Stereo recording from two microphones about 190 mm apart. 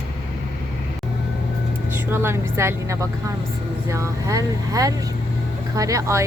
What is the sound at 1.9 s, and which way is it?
Speech, 10° right (ahead or behind).